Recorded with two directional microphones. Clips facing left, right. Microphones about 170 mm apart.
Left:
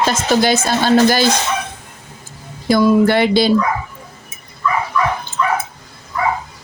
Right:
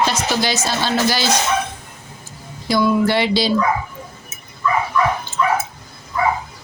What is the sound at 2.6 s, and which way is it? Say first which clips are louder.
Speech: left 4 dB; 50° left (ahead or behind).